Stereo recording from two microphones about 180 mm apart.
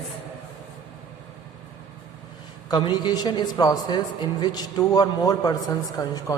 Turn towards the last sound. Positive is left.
turn(degrees=20)  # may be behind; listen again after turning